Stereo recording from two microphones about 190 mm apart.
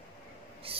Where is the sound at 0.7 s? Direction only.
30° right (ahead or behind).